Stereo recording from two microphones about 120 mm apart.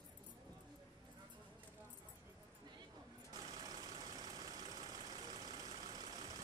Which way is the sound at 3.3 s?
35° right (ahead or behind).